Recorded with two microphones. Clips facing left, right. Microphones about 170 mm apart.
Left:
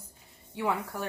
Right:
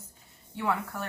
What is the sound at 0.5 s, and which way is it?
Speech, 15° left (ahead or behind).